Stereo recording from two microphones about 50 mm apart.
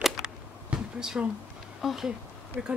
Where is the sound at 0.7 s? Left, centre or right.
Right.